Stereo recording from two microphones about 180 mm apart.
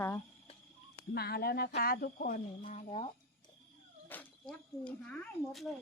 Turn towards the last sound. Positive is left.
turn(degrees=5)  # may be behind; listen again after turning